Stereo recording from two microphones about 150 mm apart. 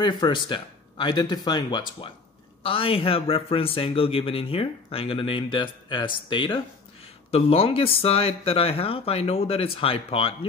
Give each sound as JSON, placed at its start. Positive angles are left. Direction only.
{"t": 0.0, "sound": "a man's voice", "side_deg": 30}